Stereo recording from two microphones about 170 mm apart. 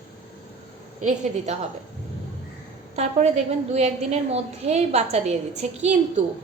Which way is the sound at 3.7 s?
40° right (ahead or behind).